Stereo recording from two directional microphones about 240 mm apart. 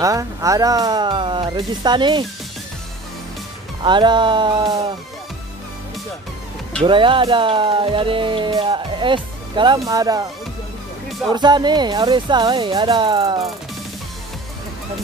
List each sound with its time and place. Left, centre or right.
0.0 s speech: centre
3.8 s speech: centre
6.8 s speech: right
11.3 s speech: centre